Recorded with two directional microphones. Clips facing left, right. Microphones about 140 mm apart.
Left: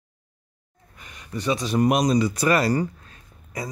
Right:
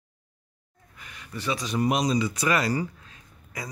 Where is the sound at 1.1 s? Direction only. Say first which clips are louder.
Left 5 dB; 20° left (ahead or behind).